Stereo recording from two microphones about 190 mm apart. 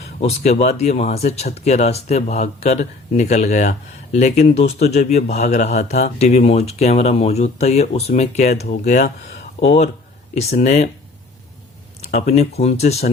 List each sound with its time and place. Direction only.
0.2 s speech: 35° left (ahead or behind)
9.0 s a sound: 55° left (ahead or behind)
9.6 s speech: 35° left (ahead or behind)
12.1 s speech: 35° left (ahead or behind)